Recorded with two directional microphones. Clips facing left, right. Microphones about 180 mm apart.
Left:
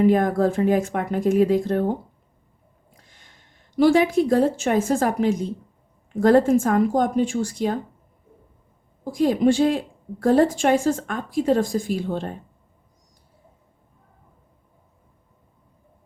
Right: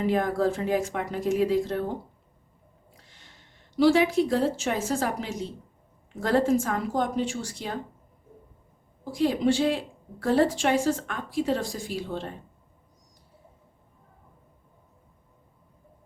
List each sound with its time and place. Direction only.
0.0 s speech: 50° left (ahead or behind)
3.1 s a sound: 50° left (ahead or behind)
3.8 s speech: 50° left (ahead or behind)
9.0 s speech: 50° left (ahead or behind)